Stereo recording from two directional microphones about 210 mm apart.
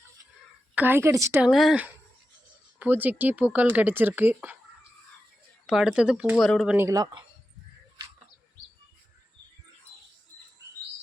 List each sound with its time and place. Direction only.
0.8 s speech: 10° right (ahead or behind)
1.5 s speech: centre (ahead or behind)
5.6 s speech: 5° right (ahead or behind)
6.7 s speech: 15° right (ahead or behind)